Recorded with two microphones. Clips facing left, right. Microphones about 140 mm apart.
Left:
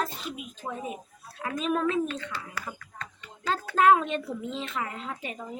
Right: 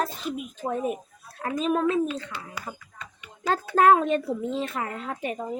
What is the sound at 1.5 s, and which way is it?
Speech, 35° right (ahead or behind).